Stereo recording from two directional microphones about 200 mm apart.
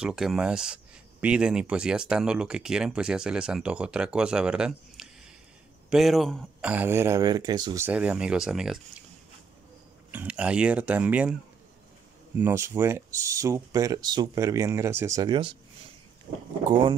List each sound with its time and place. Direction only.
0.0 s speech: 5° right (ahead or behind)
10.1 s speech: 5° right (ahead or behind)
12.4 s speech: 10° right (ahead or behind)